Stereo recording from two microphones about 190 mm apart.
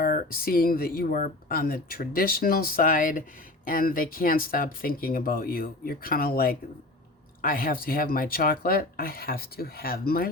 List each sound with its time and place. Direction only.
0.0 s speech: 50° left (ahead or behind)